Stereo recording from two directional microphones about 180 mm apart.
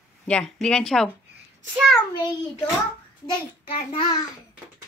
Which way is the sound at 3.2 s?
25° left (ahead or behind).